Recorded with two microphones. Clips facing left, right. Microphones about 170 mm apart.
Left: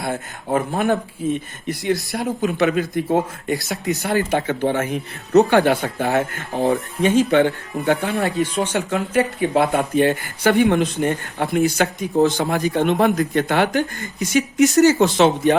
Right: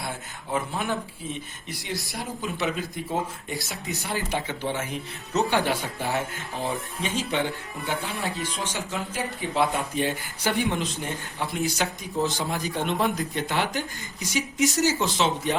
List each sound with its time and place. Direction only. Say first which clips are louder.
0.0 s speech: left 9 dB; 55° left (ahead or behind)
4.3 s speech: left 9 dB; 55° left (ahead or behind)